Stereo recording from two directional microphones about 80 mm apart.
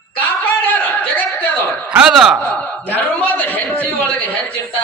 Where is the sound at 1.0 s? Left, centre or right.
Centre.